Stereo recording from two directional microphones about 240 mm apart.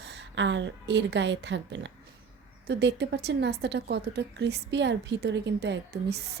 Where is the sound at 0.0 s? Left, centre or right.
Right.